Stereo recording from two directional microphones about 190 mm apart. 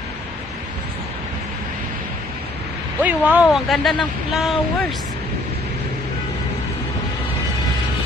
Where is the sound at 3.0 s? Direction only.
10° right (ahead or behind).